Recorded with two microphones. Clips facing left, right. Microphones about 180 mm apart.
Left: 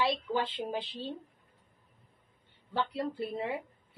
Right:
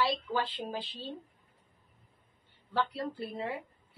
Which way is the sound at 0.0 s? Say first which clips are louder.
Left 1 dB; 20° left (ahead or behind).